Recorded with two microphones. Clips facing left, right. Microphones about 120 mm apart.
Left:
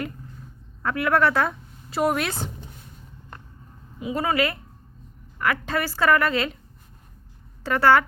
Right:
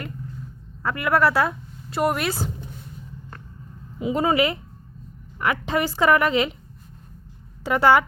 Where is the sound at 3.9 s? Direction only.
25° right (ahead or behind).